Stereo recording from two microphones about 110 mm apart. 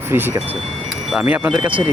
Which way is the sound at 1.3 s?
15° right (ahead or behind).